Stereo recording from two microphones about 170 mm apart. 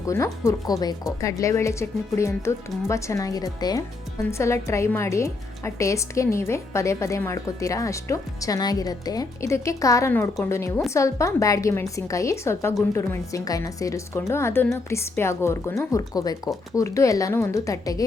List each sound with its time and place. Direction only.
0.0 s a woman's voice: 15° left (ahead or behind)